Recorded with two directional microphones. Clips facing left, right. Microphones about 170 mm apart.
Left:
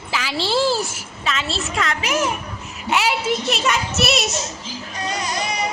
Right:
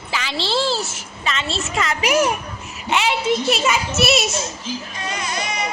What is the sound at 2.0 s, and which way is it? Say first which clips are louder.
Speech: right 6 dB; 15° right (ahead or behind).